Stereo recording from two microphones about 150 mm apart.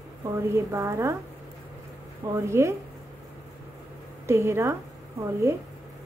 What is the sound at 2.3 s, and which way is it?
Speech, 20° right (ahead or behind).